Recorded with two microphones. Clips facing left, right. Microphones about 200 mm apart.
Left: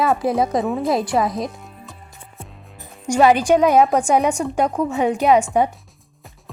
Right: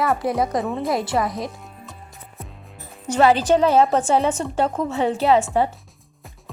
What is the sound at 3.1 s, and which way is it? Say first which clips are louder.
A woman's voice: left 2 dB; 15° left (ahead or behind).